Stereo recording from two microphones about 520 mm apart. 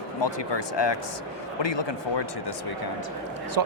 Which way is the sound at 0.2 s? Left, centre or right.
Left.